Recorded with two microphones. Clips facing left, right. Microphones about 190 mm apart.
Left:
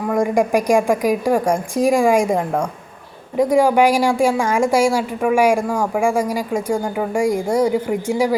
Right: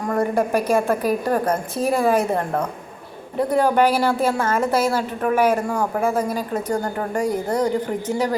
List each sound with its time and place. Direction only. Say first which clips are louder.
0.0 s a woman's voice: left 3 dB; 10° left (ahead or behind)